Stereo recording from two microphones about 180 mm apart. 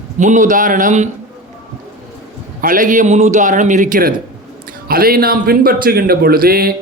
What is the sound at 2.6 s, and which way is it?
A man's voice, 50° right (ahead or behind).